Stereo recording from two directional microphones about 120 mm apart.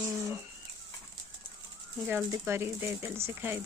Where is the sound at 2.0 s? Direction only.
20° right (ahead or behind).